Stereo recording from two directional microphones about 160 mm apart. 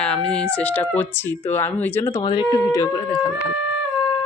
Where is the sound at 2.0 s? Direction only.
30° left (ahead or behind).